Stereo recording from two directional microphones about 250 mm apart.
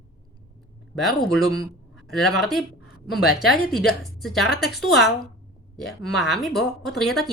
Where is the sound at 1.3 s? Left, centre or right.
Centre.